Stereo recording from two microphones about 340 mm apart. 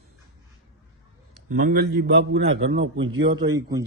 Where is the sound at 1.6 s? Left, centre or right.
Right.